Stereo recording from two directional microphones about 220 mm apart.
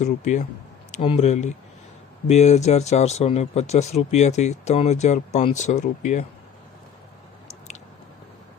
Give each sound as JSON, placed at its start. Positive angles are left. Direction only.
{"t": 0.0, "sound": "speech", "side_deg": 35}